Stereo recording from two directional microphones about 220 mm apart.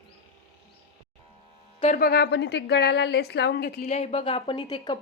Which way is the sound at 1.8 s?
35° left (ahead or behind).